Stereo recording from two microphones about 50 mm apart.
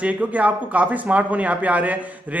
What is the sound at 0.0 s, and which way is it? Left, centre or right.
A man's voice, right.